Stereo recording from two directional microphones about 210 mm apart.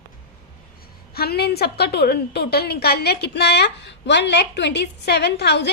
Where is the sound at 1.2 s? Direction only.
50° left (ahead or behind).